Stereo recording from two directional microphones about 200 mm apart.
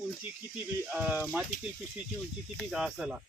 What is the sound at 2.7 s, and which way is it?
Speech, centre (ahead or behind).